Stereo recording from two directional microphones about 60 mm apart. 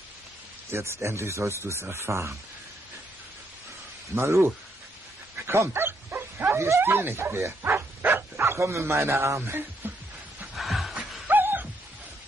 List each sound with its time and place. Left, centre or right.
0.7 s speech: right
4.1 s speech: right
5.5 s bow-wow: right
6.8 s speech: right
10.5 s a sound: centre
11.0 s a sound: right